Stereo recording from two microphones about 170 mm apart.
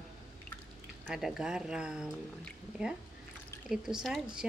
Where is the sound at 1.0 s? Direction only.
Centre (ahead or behind).